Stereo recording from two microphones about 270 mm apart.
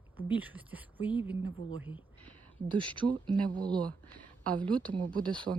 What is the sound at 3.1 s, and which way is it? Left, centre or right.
A woman's voice, centre.